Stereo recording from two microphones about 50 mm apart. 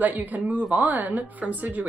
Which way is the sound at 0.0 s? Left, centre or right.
Right.